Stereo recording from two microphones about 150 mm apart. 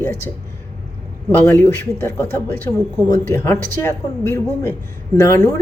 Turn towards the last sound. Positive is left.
turn(degrees=20)  # may be behind; listen again after turning